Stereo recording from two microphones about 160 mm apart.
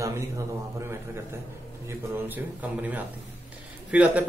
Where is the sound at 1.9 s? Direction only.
10° right (ahead or behind).